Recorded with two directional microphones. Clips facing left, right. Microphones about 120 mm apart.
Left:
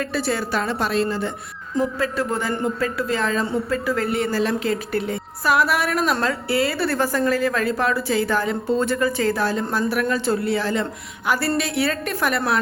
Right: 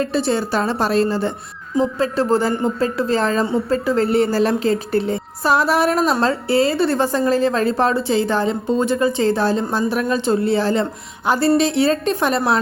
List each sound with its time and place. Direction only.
0.0 s a woman's voice: 25° right (ahead or behind)